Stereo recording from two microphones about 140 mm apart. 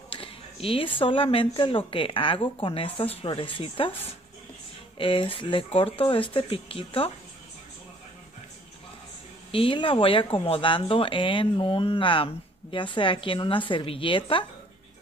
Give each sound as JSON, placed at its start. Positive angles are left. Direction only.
{"t": 0.1, "sound": "speech", "side_deg": 40}
{"t": 4.9, "sound": "speech", "side_deg": 40}
{"t": 9.5, "sound": "speech", "side_deg": 40}